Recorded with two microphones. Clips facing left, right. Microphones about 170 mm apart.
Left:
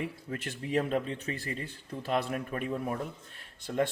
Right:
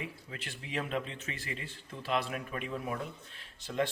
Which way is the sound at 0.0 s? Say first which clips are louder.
Left 7 dB; 50° left (ahead or behind).